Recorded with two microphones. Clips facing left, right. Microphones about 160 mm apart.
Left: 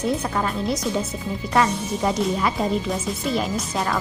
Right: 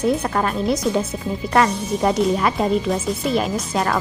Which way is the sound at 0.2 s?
55° right (ahead or behind).